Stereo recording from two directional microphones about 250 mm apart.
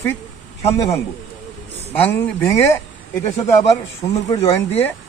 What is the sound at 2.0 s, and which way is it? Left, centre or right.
Speech, centre.